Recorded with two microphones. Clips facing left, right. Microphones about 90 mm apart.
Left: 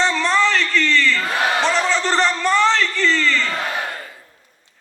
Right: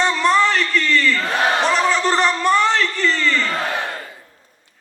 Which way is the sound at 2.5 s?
40° right (ahead or behind).